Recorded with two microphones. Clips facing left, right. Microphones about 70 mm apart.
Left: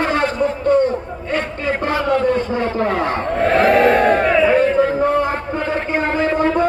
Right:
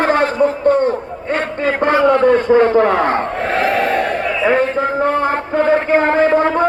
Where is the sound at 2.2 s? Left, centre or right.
Right.